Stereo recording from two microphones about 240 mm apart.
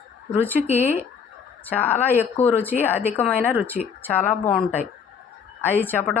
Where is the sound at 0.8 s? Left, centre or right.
Left.